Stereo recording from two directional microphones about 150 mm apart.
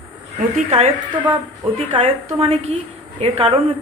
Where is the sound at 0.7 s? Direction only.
40° right (ahead or behind).